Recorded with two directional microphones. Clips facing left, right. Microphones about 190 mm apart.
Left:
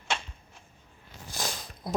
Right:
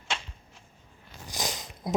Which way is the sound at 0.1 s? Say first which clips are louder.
Left 3 dB; 55° left (ahead or behind).